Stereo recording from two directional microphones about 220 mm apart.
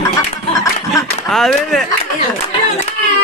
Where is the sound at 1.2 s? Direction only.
Centre (ahead or behind).